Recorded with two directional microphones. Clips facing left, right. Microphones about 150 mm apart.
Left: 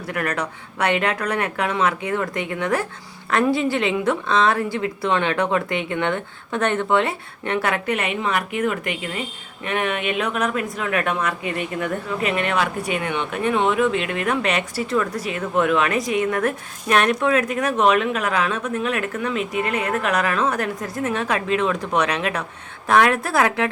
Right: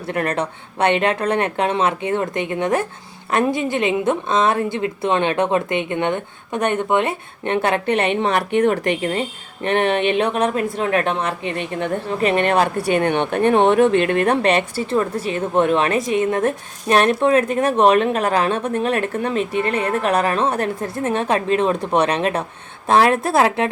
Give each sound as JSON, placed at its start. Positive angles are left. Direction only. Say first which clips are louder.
{"t": 0.1, "sound": "speech", "louder": "right 4 dB", "side_deg": -30}
{"t": 14.3, "sound": "speech", "louder": "right 5 dB", "side_deg": -35}